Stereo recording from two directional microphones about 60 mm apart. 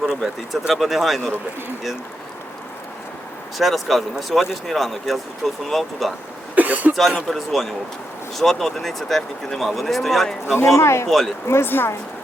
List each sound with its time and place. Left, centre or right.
0.0 s speech: centre
3.6 s speech: centre
6.6 s speech: right
7.3 s speech: centre
10.4 s speech: left